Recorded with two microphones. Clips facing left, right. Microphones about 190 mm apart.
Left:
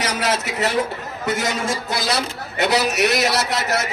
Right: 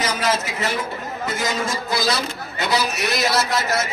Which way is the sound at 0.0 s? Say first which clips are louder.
Even; 70° left (ahead or behind).